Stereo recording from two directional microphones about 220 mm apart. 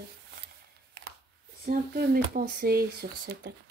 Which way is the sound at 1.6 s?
45° right (ahead or behind).